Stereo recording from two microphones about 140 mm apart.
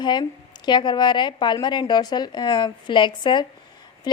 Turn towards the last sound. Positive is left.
turn(degrees=30)  # may be behind; listen again after turning